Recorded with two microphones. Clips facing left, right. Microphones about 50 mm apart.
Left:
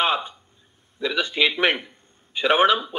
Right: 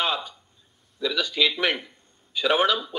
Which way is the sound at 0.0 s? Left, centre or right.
Left.